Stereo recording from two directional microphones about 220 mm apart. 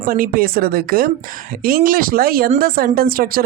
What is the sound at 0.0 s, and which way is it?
Speech, 40° right (ahead or behind).